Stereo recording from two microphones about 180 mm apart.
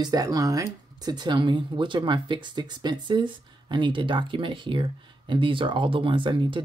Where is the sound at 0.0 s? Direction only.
20° right (ahead or behind).